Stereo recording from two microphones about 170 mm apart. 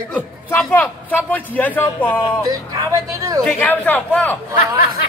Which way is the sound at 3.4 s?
10° left (ahead or behind).